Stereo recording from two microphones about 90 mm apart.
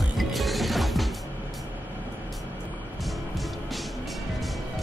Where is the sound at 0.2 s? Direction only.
Centre (ahead or behind).